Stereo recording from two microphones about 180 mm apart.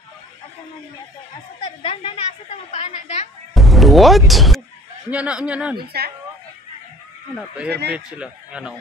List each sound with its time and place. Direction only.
1.6 s a woman's voice: 30° left (ahead or behind)
3.5 s speech: centre (ahead or behind)
5.8 s a woman's voice: 60° right (ahead or behind)
7.3 s a man's voice: 5° right (ahead or behind)